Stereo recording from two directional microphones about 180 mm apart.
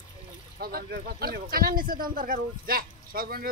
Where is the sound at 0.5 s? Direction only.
55° right (ahead or behind).